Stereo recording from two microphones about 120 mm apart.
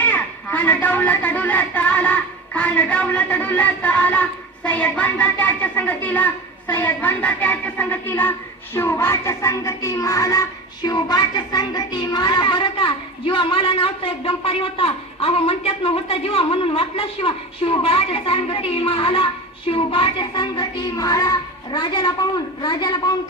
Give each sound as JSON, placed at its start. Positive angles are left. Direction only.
{"t": 0.0, "sound": "a woman's voice", "side_deg": 15}
{"t": 8.7, "sound": "music", "side_deg": 20}
{"t": 10.8, "sound": "a woman's voice", "side_deg": 35}